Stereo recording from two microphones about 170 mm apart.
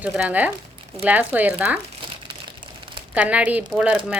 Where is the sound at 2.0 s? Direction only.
30° right (ahead or behind).